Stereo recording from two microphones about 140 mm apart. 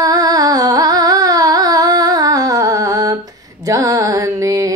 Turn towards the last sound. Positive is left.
turn(degrees=-25)  # may be behind; listen again after turning